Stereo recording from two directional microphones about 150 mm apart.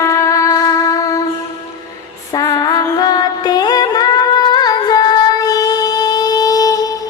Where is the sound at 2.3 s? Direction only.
25° left (ahead or behind).